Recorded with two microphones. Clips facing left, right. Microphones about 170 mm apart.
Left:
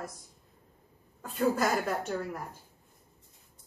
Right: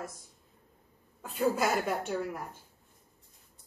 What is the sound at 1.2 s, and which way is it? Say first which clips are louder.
A woman's voice: left 1 dB; 5° right (ahead or behind).